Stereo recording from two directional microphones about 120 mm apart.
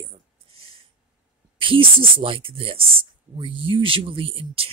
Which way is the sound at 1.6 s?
45° right (ahead or behind).